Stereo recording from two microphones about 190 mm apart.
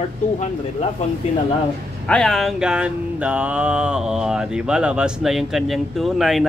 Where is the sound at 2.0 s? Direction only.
5° left (ahead or behind).